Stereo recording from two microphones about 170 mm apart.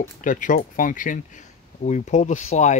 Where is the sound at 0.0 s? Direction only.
50° left (ahead or behind).